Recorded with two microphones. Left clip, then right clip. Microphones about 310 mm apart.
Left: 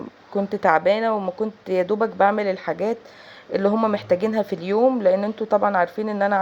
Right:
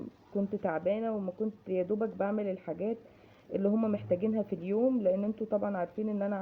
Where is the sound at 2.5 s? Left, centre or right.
Left.